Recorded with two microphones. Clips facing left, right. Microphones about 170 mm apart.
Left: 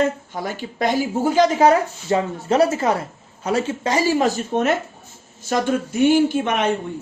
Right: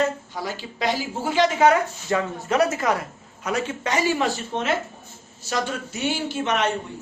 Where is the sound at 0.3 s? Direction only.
50° left (ahead or behind).